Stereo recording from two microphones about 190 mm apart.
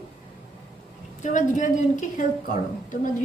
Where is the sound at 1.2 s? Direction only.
40° left (ahead or behind).